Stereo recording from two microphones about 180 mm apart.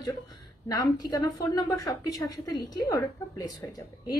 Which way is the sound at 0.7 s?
20° left (ahead or behind).